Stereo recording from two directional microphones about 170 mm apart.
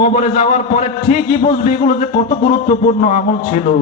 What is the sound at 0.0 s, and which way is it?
A man's voice, 45° left (ahead or behind).